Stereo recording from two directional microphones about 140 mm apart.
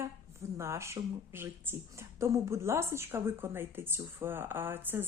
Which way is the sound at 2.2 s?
20° right (ahead or behind).